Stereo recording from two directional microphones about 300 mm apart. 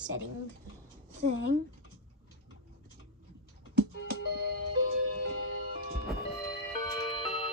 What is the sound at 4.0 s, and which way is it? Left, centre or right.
Music, left.